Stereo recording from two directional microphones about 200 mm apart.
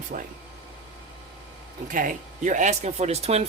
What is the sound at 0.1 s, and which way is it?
Speech, 45° right (ahead or behind).